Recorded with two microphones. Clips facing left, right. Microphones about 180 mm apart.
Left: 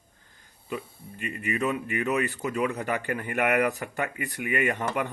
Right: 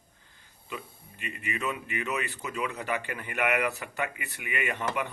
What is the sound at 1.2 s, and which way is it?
Speech, 45° left (ahead or behind).